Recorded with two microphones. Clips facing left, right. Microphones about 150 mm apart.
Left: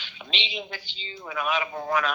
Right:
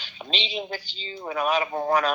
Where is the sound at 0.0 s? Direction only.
35° right (ahead or behind).